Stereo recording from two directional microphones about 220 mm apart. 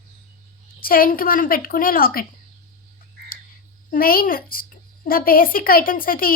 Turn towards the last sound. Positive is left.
turn(degrees=40)  # may be behind; listen again after turning